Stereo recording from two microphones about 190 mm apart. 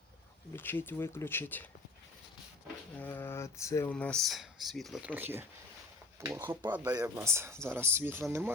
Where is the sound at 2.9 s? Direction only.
10° left (ahead or behind).